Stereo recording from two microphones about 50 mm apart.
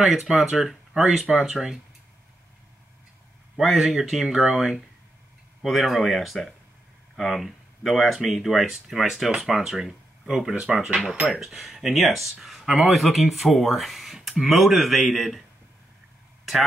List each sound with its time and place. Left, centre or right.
0.0 s speech: centre
3.5 s speech: centre
10.7 s speech: centre